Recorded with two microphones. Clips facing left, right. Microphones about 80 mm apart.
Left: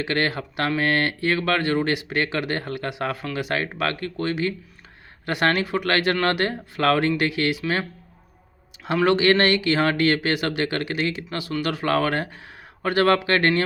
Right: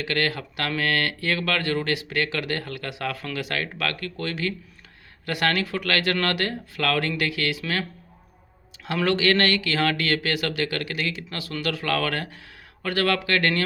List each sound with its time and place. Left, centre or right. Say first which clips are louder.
0.0 s speech: left 2 dB; left
9.0 s speech: left 3 dB; left